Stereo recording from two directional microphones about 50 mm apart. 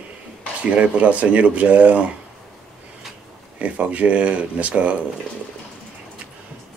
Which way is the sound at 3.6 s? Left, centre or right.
Right.